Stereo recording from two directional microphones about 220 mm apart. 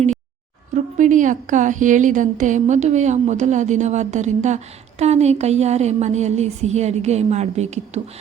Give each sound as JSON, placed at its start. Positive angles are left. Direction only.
{"t": 0.9, "sound": "a woman's voice", "side_deg": -35}